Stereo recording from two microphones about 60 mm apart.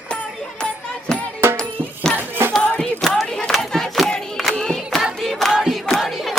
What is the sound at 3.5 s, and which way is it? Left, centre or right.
Battle cry, centre.